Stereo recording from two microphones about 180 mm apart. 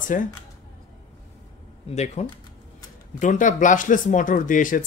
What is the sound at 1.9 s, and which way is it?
Speech, 40° left (ahead or behind).